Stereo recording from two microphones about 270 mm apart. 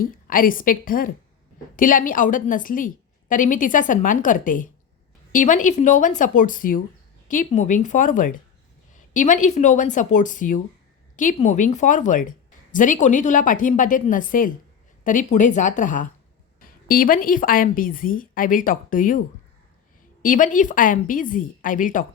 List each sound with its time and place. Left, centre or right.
0.0 s a woman's voice: left
20.2 s a woman's voice: left